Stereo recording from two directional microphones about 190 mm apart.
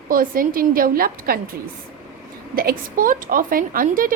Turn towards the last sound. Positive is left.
turn(degrees=-45)  # may be behind; listen again after turning